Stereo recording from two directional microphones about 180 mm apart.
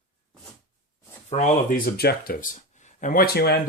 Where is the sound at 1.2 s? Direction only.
40° left (ahead or behind).